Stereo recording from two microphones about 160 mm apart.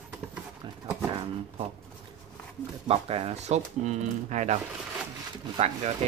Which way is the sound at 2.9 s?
35° right (ahead or behind).